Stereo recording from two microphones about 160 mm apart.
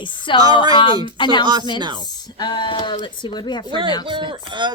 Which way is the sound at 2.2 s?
25° left (ahead or behind).